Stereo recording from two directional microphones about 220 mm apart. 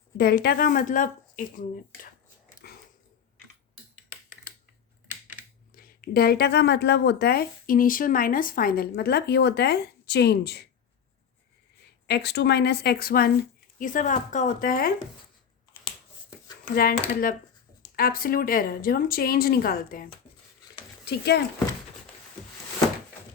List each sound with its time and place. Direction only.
0.2 s speech: 45° left (ahead or behind)
2.6 s a sound: 45° left (ahead or behind)
5.7 s speech: 40° left (ahead or behind)
12.0 s speech: 50° left (ahead or behind)
16.7 s speech: 40° left (ahead or behind)